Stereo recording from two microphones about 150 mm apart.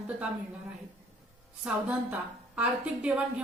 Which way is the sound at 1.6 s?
10° right (ahead or behind).